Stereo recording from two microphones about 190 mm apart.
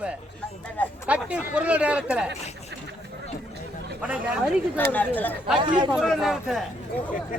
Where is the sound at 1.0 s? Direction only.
5° right (ahead or behind).